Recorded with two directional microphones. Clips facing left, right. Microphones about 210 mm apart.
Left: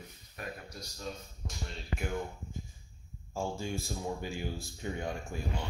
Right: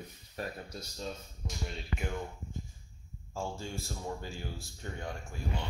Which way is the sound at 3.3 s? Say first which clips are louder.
Left 3 dB; 15° left (ahead or behind).